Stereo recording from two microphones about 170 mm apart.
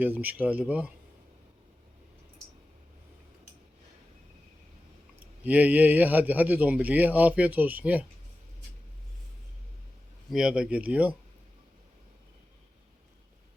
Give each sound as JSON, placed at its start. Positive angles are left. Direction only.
{"t": 0.0, "sound": "a man's voice", "side_deg": -10}
{"t": 5.2, "sound": "a man's voice", "side_deg": -10}
{"t": 10.2, "sound": "a man's voice", "side_deg": -5}